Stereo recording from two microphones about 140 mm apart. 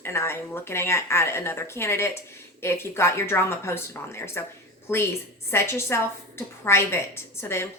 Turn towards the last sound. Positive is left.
turn(degrees=15)  # may be behind; listen again after turning